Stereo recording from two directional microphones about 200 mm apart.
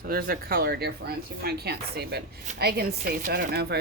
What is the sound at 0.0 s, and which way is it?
Speech, 50° right (ahead or behind).